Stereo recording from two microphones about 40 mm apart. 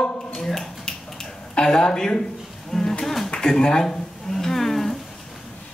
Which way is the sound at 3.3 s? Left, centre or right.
Centre.